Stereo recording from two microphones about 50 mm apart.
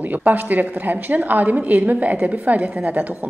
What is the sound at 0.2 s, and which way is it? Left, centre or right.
A woman's voice, right.